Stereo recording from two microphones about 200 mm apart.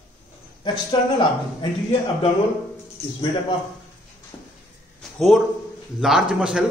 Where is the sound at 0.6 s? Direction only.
20° left (ahead or behind).